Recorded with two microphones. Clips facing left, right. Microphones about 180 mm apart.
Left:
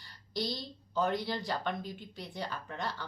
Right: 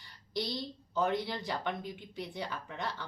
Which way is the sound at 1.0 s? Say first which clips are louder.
Right 1 dB; 20° right (ahead or behind).